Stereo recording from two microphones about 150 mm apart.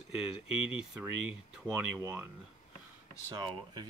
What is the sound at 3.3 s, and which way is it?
Speech, 30° right (ahead or behind).